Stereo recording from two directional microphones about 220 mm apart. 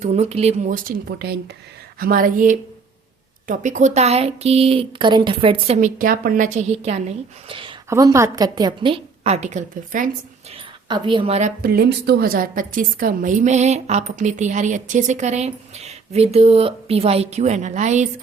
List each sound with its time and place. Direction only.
0.0 s a woman's voice: 30° right (ahead or behind)
10.8 s a woman's voice: 20° right (ahead or behind)